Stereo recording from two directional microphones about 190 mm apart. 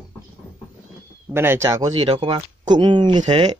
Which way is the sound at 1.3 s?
15° right (ahead or behind).